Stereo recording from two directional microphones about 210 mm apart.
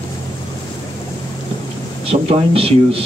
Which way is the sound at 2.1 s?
25° right (ahead or behind).